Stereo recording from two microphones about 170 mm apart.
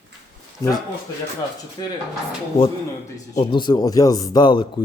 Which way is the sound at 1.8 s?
25° left (ahead or behind).